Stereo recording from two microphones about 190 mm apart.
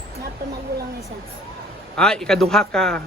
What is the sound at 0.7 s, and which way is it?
Speech, 55° right (ahead or behind).